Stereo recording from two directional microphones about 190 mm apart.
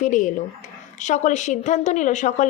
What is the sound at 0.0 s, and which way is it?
A woman's voice, 40° left (ahead or behind).